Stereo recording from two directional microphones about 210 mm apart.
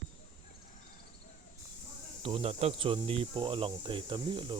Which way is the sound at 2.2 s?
25° right (ahead or behind).